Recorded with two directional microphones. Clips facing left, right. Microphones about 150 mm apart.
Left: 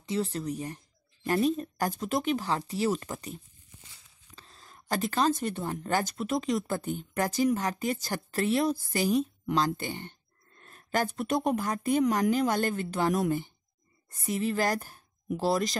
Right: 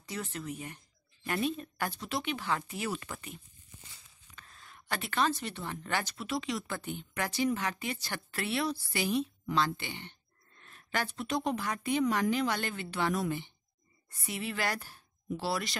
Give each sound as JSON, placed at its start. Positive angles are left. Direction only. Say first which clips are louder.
{"t": 0.0, "sound": "speech", "louder": "left 8 dB", "side_deg": 30}
{"t": 4.4, "sound": "speech", "louder": "left 1 dB", "side_deg": 30}